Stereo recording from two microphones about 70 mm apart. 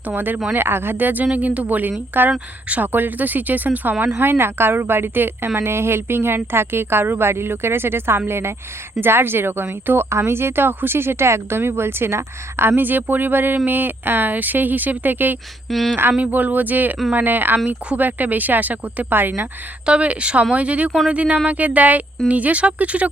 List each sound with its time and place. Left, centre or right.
0.1 s speech: right
15.7 s speech: centre
16.1 s speech: centre